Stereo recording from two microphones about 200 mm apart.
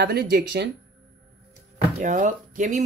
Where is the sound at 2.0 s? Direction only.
40° right (ahead or behind).